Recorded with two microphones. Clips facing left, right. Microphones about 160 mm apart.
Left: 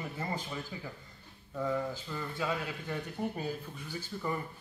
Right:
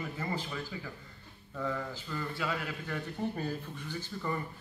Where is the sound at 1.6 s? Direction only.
20° left (ahead or behind).